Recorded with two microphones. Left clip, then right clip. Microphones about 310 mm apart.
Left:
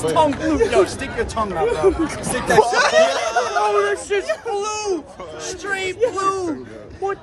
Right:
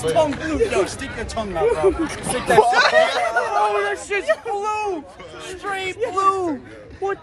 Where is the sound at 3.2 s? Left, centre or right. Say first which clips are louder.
Even; centre.